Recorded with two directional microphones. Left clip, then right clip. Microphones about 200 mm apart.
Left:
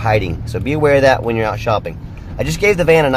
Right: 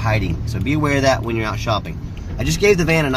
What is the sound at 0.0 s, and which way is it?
Speech, 45° left (ahead or behind).